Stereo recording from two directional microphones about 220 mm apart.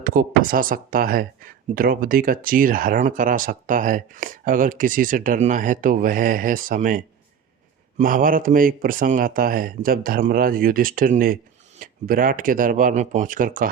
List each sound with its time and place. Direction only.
0.0 s speech: 40° right (ahead or behind)